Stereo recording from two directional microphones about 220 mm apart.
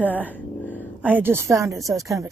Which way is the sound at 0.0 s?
10° left (ahead or behind).